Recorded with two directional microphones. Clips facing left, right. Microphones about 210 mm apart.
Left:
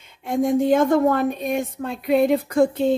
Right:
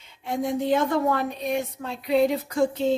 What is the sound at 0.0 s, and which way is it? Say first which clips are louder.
A woman's voice: left 6 dB; 50° left (ahead or behind).